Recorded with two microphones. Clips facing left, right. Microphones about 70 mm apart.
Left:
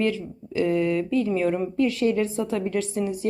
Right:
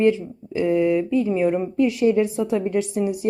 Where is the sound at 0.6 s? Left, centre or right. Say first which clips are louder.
Right 3 dB; centre.